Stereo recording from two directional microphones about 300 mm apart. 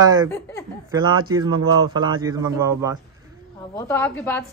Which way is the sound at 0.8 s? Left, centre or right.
Centre.